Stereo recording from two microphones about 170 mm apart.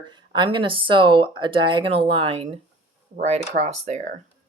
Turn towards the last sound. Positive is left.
turn(degrees=-45)  # may be behind; listen again after turning